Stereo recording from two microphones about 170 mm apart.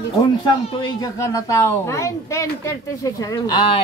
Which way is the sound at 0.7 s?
20° left (ahead or behind).